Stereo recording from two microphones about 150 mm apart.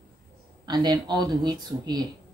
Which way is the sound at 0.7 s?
30° right (ahead or behind).